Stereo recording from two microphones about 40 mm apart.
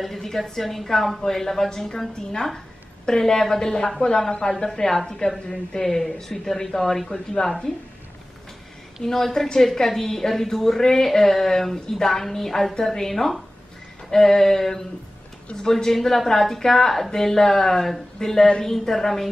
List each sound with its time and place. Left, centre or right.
0.0 s a woman's voice: centre
9.0 s a woman's voice: centre